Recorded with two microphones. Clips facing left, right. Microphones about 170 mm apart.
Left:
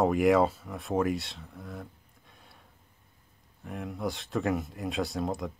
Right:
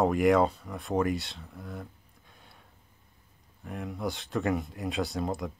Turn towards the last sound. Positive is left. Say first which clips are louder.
# even
turn(degrees=0)  # may be behind; listen again after turning